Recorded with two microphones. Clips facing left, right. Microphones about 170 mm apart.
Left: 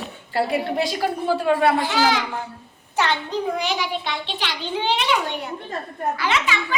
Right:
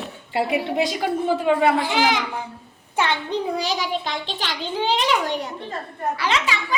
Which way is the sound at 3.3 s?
35° right (ahead or behind).